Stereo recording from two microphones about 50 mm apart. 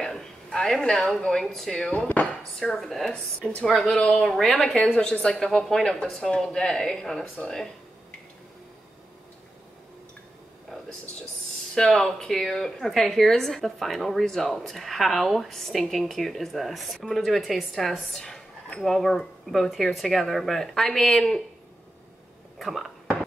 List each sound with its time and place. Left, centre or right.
0.0 s a woman's voice: centre
2.6 s speech: centre
3.9 s speech: centre
11.7 s speech: centre
22.6 s a sound: centre